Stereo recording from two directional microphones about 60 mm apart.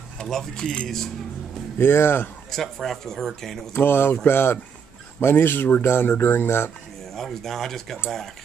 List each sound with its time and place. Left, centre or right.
0.3 s speech: centre
1.8 s speech: left
2.5 s speech: centre
3.7 s speech: left
7.2 s speech: centre